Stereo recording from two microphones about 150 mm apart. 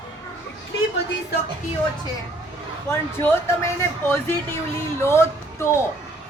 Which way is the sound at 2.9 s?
15° left (ahead or behind).